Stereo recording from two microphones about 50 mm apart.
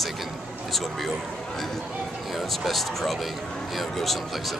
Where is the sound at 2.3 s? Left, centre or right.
Centre.